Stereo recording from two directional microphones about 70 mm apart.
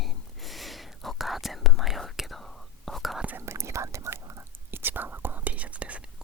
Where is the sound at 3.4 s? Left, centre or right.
Right.